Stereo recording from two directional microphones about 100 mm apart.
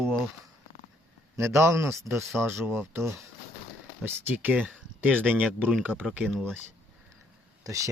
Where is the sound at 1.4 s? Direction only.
30° right (ahead or behind).